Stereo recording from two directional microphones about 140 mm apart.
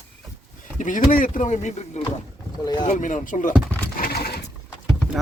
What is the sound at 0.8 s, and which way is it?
Speech, 70° left (ahead or behind).